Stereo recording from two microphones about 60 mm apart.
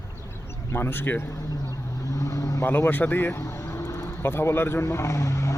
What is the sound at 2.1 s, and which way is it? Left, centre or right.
Vehicle, left.